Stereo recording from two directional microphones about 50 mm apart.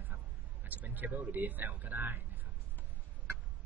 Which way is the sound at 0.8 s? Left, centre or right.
Right.